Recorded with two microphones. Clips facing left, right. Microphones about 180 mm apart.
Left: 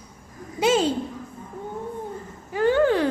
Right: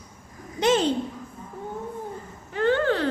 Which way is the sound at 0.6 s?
5° left (ahead or behind).